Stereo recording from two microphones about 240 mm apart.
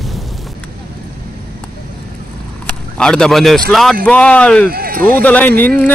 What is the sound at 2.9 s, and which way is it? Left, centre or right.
Speech, centre.